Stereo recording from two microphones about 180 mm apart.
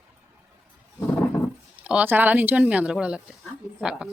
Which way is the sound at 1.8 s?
10° right (ahead or behind).